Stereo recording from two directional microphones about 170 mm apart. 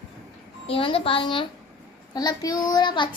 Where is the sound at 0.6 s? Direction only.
35° left (ahead or behind).